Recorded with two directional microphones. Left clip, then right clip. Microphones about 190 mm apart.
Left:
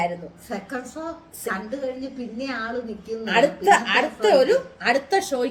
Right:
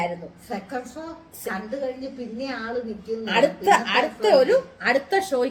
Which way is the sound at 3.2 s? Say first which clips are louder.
Left 1 dB; 5° right (ahead or behind).